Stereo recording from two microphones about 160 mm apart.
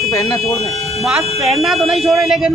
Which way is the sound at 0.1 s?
20° left (ahead or behind).